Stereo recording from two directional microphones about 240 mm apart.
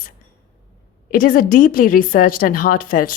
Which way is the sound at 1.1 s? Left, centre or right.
Left.